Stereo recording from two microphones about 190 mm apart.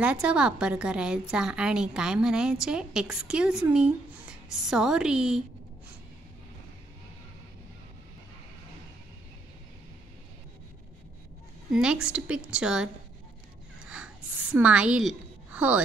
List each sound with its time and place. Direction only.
0.0 s a woman's voice: 5° right (ahead or behind)
11.7 s a woman's voice: 5° right (ahead or behind)
13.7 s a sound: 5° right (ahead or behind)